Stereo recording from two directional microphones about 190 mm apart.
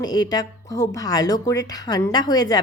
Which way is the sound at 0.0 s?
20° left (ahead or behind).